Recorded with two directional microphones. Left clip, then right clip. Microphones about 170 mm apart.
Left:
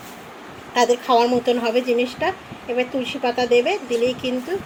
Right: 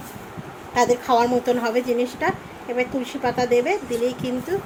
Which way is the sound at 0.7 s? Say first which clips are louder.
Left 2 dB; 10° left (ahead or behind).